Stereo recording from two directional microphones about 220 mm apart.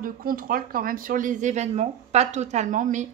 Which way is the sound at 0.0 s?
40° right (ahead or behind).